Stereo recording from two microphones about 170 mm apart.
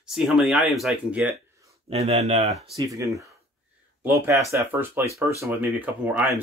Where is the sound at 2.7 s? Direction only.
20° right (ahead or behind).